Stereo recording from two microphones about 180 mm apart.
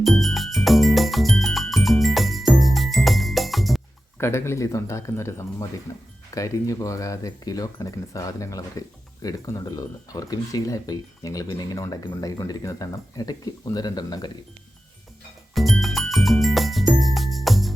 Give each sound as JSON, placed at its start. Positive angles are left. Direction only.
{"t": 0.0, "sound": "music", "side_deg": 0}
{"t": 4.2, "sound": "speech", "side_deg": 15}
{"t": 15.5, "sound": "music", "side_deg": 0}